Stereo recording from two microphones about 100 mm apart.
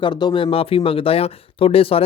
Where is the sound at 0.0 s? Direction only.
50° left (ahead or behind).